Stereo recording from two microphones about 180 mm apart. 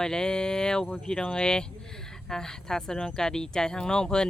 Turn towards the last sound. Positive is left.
turn(degrees=5)  # may be behind; listen again after turning